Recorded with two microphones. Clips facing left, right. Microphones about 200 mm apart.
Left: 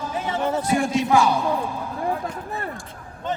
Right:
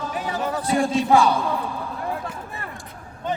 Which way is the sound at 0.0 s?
25° left (ahead or behind).